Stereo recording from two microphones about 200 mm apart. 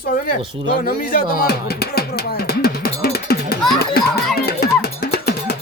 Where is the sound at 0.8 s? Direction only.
45° left (ahead or behind).